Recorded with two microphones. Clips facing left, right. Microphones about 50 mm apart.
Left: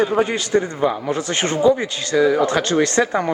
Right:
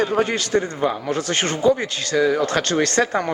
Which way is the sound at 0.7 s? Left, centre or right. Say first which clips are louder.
Left 2 dB; centre.